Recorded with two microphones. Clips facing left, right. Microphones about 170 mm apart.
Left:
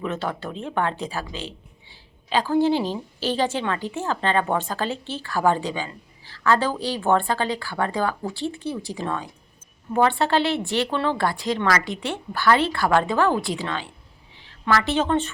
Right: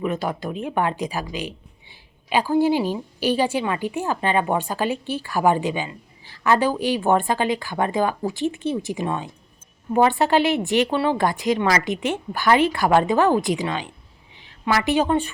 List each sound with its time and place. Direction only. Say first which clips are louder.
0.0 s a woman's voice: right 3 dB; 10° right (ahead or behind)